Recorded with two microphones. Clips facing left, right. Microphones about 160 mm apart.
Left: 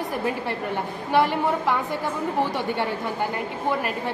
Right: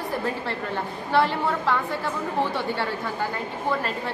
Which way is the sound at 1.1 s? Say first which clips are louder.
Left 1 dB; 15° left (ahead or behind).